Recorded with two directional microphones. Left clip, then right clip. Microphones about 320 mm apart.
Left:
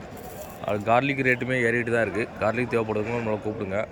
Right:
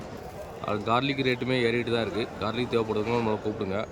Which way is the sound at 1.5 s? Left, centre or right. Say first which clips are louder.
Left 2 dB; right.